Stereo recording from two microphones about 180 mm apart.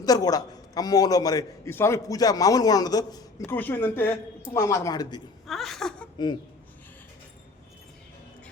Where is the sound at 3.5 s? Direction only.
10° left (ahead or behind).